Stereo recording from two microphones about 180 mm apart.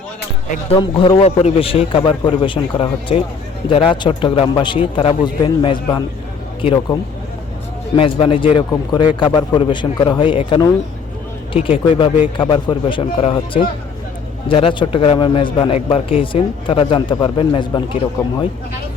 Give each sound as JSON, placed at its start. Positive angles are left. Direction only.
{"t": 0.7, "sound": "a man's voice", "side_deg": 30}
{"t": 7.9, "sound": "a man's voice", "side_deg": 30}
{"t": 11.9, "sound": "a man's voice", "side_deg": 30}